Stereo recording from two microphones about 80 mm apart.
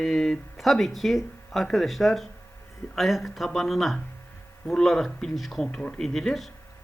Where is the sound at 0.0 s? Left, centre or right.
Centre.